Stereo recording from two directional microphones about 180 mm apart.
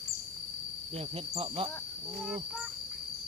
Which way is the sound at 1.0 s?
35° right (ahead or behind).